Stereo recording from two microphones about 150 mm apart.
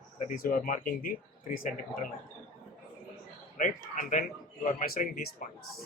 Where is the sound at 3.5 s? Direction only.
60° left (ahead or behind).